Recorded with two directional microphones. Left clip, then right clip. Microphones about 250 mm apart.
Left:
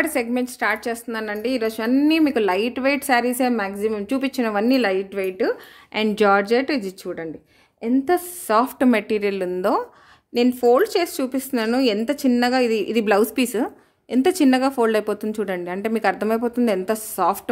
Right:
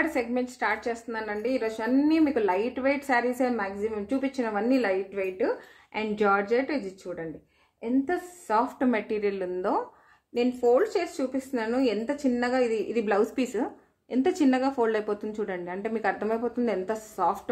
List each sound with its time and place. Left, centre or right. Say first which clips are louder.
0.0 s a woman's voice: left 5 dB; left